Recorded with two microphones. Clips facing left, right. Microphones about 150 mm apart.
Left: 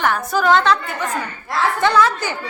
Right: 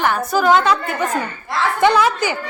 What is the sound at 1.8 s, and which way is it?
Speech, 15° right (ahead or behind).